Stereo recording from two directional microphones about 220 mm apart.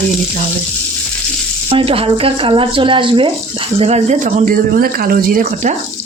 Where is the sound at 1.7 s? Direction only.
25° right (ahead or behind).